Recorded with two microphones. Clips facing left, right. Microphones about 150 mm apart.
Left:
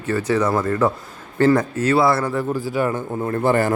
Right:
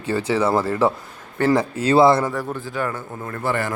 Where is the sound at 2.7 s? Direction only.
15° left (ahead or behind).